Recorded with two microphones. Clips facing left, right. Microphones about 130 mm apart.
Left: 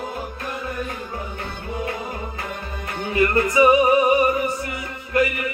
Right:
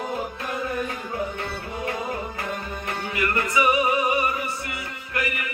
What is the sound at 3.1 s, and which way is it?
Music, 30° left (ahead or behind).